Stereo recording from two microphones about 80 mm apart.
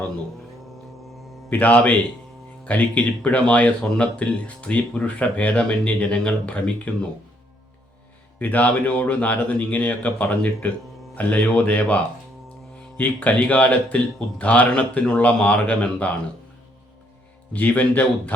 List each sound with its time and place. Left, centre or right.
1.5 s speech: centre
8.4 s speech: left
13.0 s speech: left
17.5 s speech: left